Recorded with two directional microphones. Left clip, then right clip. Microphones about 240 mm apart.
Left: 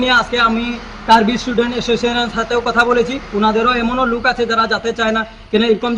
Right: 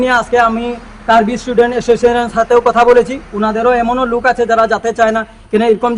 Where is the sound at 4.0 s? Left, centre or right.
Centre.